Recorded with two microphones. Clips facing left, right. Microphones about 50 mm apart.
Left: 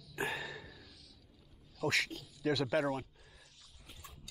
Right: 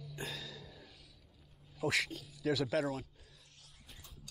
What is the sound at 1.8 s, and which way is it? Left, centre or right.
Speech, centre.